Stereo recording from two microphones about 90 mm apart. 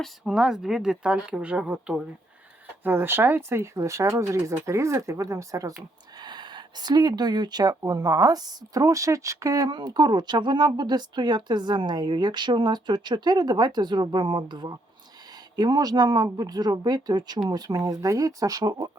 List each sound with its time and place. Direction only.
0.3 s speech: 5° right (ahead or behind)
2.8 s speech: 25° right (ahead or behind)
6.1 s speech: 55° right (ahead or behind); by 9.7 s 40° right (ahead or behind)
9.7 s speech: 50° right (ahead or behind)